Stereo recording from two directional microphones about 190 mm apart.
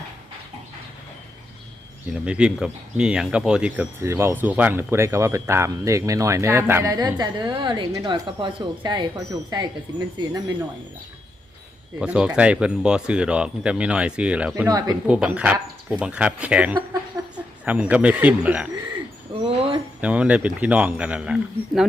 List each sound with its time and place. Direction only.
2.2 s speech: 5° right (ahead or behind); by 9.6 s 20° right (ahead or behind)
11.9 s speech: 5° right (ahead or behind)
14.5 s speech: 15° right (ahead or behind)
15.0 s speech: 5° right (ahead or behind)
19.3 s a sound: 30° right (ahead or behind)
20.0 s speech: 5° right (ahead or behind)